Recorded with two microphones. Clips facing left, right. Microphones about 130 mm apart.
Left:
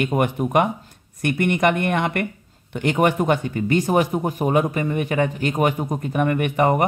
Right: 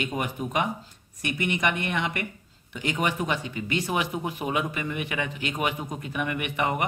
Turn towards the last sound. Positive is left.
turn(degrees=45)  # may be behind; listen again after turning